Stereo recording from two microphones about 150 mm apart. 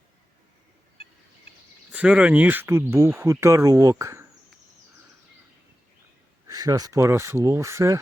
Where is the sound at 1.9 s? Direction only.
10° right (ahead or behind).